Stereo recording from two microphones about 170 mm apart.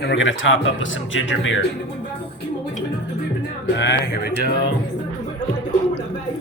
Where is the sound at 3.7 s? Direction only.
90° left; by 4.3 s 75° left (ahead or behind).